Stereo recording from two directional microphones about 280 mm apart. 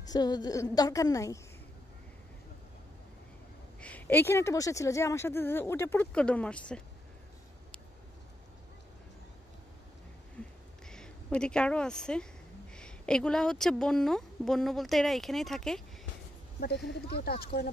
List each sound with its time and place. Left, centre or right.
0.0 s speech: centre
3.8 s speech: centre
10.9 s a woman's voice: centre
16.5 s speech: left